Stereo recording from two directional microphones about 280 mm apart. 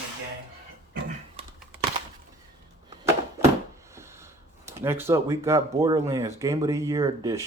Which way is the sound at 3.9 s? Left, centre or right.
Centre.